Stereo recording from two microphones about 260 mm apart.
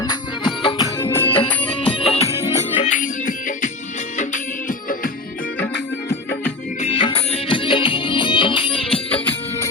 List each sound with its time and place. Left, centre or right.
0.0 s music: centre
2.0 s music: left
6.8 s music: left